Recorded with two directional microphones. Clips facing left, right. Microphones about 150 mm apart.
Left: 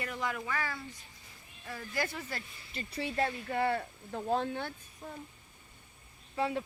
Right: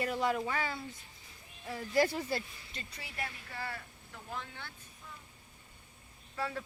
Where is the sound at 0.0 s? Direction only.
30° right (ahead or behind).